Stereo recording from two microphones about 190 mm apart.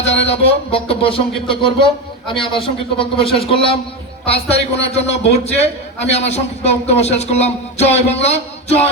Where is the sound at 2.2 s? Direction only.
25° left (ahead or behind).